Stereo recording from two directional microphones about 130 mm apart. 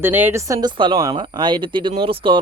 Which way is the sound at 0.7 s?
35° right (ahead or behind).